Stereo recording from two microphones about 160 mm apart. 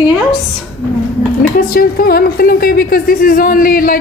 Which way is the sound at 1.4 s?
65° left (ahead or behind).